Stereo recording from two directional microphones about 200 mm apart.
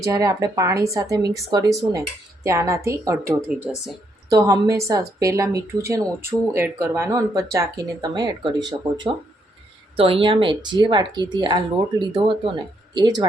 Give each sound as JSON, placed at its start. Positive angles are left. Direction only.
{"t": 0.0, "sound": "speech", "side_deg": -15}
{"t": 10.0, "sound": "speech", "side_deg": -25}